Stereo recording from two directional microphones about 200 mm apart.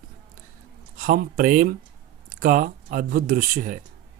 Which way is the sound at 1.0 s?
45° right (ahead or behind).